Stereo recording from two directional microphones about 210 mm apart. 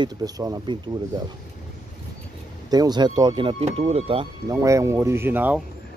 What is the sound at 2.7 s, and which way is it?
Speech, 20° right (ahead or behind).